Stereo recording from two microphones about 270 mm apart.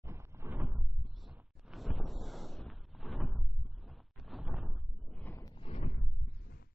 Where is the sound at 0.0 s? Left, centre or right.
Centre; by 5.9 s left.